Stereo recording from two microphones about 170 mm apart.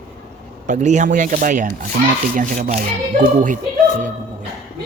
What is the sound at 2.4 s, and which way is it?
Speech, 40° right (ahead or behind).